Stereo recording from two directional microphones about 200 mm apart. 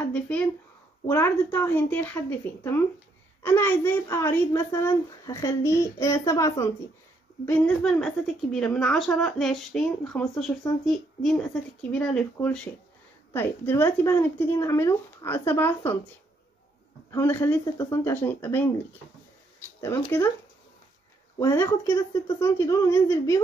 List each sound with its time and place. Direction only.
0.0 s a sound: 5° left (ahead or behind)
1.0 s a woman's voice: 10° left (ahead or behind)
17.1 s a woman's voice: 10° left (ahead or behind)
19.9 s a woman's voice: 10° left (ahead or behind)
21.4 s a woman's voice: 15° left (ahead or behind)